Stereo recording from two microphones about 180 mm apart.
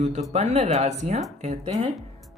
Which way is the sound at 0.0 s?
40° right (ahead or behind).